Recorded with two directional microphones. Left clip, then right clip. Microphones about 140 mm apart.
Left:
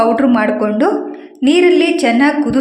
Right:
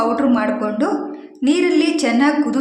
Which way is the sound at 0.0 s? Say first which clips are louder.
Left 5 dB; 25° left (ahead or behind).